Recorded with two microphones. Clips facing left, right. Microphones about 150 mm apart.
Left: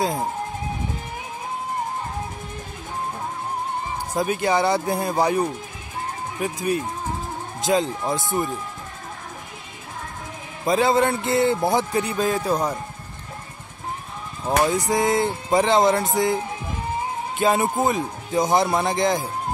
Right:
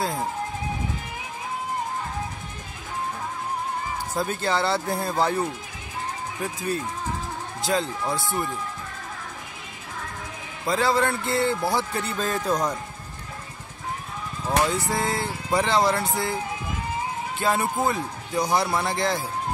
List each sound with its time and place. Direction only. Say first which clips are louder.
0.0 s speech: left 3 dB; 20° left (ahead or behind)
4.1 s speech: left 5 dB; 15° left (ahead or behind)
10.6 s speech: left 4 dB; 20° left (ahead or behind)
14.4 s speech: left 3 dB; 15° left (ahead or behind)
17.4 s speech: left 4 dB; 20° left (ahead or behind)